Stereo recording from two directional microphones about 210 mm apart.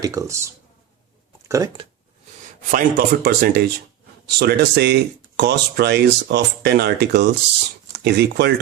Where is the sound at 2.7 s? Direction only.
45° right (ahead or behind).